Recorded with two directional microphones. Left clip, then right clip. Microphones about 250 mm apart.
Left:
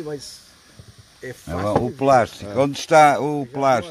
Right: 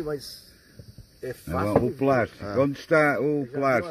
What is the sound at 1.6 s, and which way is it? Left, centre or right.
Speech, left.